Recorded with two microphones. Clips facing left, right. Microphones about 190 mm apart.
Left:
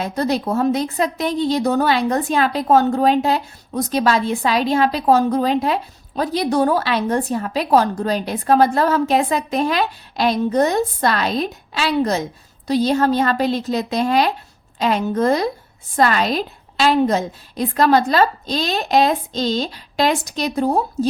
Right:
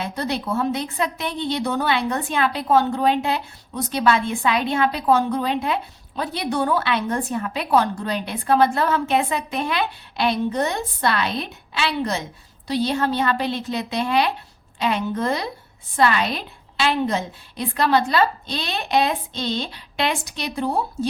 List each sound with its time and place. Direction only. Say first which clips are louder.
0.0 s a woman's voice: left 5 dB; 40° left (ahead or behind)